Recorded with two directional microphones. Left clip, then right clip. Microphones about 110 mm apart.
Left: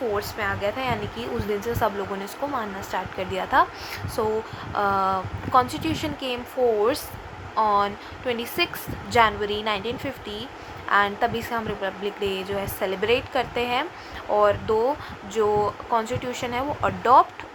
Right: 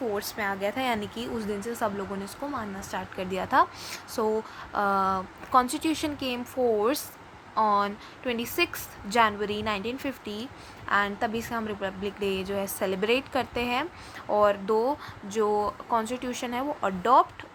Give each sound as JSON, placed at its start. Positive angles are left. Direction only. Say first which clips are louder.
{"t": 0.2, "sound": "a woman's voice", "louder": "left 3 dB", "side_deg": -50}
{"t": 1.2, "sound": "a woman's voice", "louder": "left 5 dB", "side_deg": -30}
{"t": 7.5, "sound": "a woman's voice", "louder": "left 3 dB", "side_deg": -45}